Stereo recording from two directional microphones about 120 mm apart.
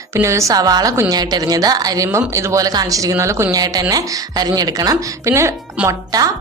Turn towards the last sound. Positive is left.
turn(degrees=-30)  # may be behind; listen again after turning